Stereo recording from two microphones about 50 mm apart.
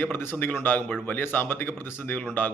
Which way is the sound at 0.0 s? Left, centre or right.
Left.